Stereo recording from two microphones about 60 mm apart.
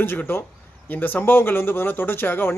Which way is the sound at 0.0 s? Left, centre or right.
Left.